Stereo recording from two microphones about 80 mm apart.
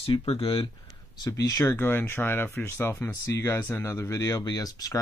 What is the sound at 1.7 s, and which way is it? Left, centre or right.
Speech, left.